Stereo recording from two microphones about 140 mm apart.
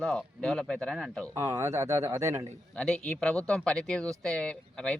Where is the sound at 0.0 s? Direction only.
5° left (ahead or behind).